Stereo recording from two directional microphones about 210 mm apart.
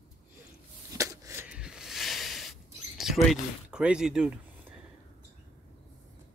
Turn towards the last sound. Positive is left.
turn(degrees=-5)  # may be behind; listen again after turning